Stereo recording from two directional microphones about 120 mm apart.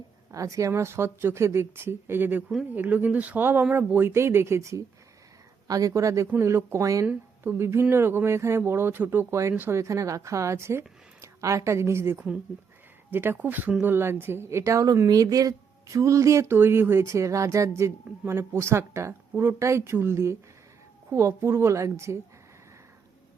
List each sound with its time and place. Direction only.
0.3 s speech: 25° right (ahead or behind)